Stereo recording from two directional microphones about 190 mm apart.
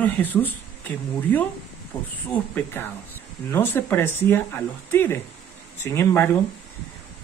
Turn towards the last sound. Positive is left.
turn(degrees=15)  # may be behind; listen again after turning